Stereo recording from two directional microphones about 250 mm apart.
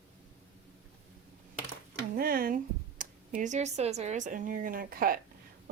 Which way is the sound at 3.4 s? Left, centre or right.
Right.